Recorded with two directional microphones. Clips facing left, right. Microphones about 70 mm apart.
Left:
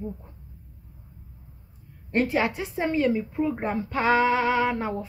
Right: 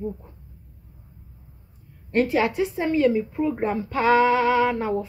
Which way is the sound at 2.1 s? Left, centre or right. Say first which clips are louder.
Right 3 dB; left.